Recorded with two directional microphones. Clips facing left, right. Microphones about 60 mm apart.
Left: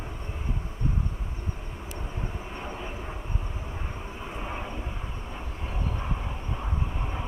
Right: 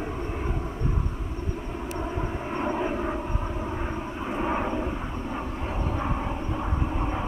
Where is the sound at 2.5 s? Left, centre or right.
Right.